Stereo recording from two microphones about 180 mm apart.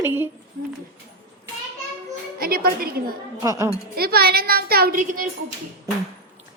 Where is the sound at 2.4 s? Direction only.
55° right (ahead or behind).